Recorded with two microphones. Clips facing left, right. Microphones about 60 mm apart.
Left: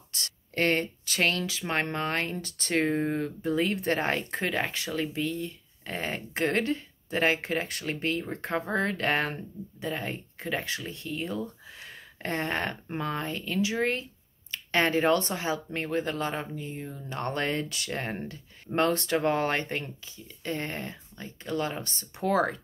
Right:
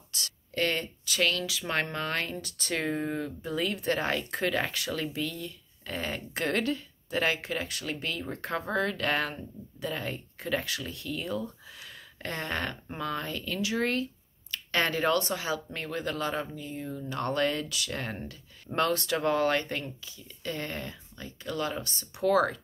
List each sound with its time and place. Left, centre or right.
0.1 s speech: left
1.6 s speech: left